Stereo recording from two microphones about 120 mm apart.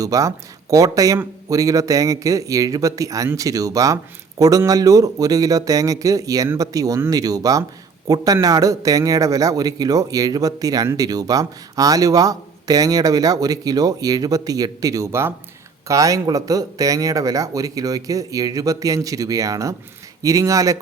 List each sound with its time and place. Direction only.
0.0 s a man's voice: 30° right (ahead or behind)